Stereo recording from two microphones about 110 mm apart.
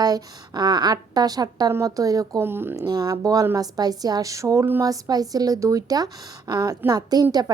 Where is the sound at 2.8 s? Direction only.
35° right (ahead or behind).